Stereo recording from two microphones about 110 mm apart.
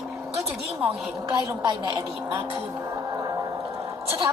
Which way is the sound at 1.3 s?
40° right (ahead or behind).